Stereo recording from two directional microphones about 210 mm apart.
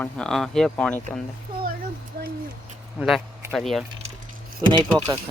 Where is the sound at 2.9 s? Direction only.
Centre (ahead or behind).